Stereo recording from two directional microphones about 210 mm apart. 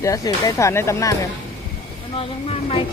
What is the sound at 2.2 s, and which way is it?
Speech, 25° left (ahead or behind).